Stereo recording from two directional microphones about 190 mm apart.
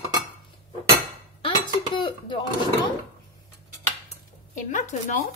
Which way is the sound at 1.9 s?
25° left (ahead or behind).